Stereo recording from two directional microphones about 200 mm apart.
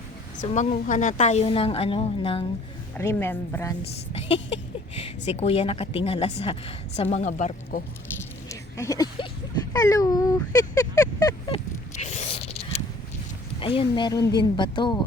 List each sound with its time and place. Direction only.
0.4 s a woman's voice: 35° left (ahead or behind)
3.0 s a woman's voice: 10° left (ahead or behind)
4.9 s a woman's voice: 30° left (ahead or behind)
8.4 s a sound: 15° left (ahead or behind)
13.6 s speech: 25° left (ahead or behind)